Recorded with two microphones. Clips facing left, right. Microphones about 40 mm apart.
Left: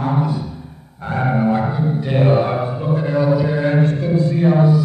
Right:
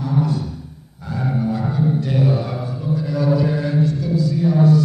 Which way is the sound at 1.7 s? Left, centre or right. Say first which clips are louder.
Right 1 dB; centre.